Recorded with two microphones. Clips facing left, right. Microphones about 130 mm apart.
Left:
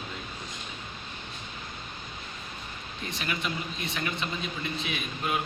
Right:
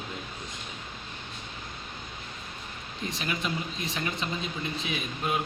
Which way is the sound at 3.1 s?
35° right (ahead or behind).